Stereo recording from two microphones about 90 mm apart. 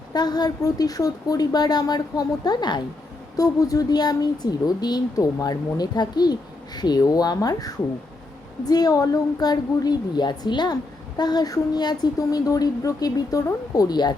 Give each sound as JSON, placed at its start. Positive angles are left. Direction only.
{"t": 0.1, "sound": "speech", "side_deg": 50}
{"t": 3.3, "sound": "speech", "side_deg": 40}